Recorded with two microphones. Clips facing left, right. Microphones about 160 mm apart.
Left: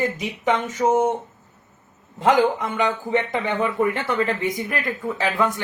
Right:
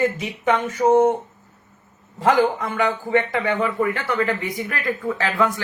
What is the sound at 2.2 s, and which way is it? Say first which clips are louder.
A man's voice: even; 20° left (ahead or behind).